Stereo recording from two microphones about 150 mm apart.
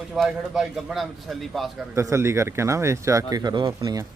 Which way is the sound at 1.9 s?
20° right (ahead or behind).